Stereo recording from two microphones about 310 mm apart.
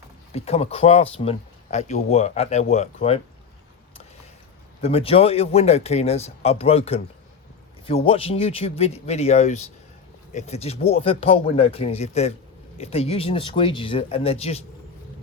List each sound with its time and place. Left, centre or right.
0.3 s speech: centre
4.8 s speech: centre